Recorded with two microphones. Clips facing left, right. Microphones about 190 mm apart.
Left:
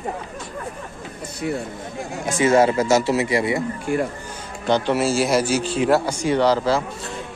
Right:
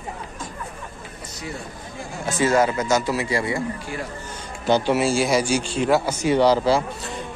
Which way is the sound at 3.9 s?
50° left (ahead or behind).